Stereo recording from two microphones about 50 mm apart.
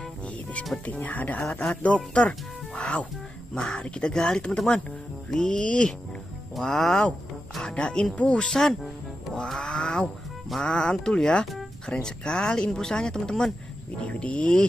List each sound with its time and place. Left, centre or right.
0.8 s speech: left
3.5 s speech: centre
7.7 s speech: left
9.5 s a sound: centre
10.6 s speech: centre
14.0 s speech: left